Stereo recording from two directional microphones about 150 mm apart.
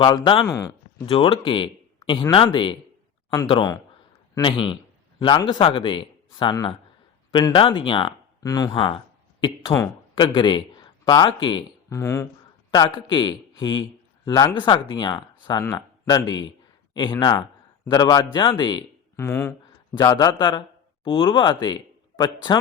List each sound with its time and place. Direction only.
0.0 s speech: 30° left (ahead or behind)
0.4 s speech: 20° left (ahead or behind)
1.0 s speech: 35° left (ahead or behind)
9.7 s speech: 20° left (ahead or behind)
10.2 s speech: 35° left (ahead or behind)
11.9 s speech: 20° left (ahead or behind)
19.1 s speech: 20° left (ahead or behind)
19.9 s speech: 30° left (ahead or behind)